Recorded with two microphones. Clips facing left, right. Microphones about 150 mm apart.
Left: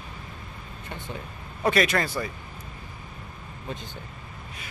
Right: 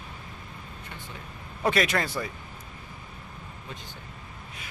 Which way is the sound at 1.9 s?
5° right (ahead or behind).